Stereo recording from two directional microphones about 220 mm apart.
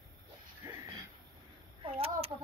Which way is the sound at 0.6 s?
15° right (ahead or behind).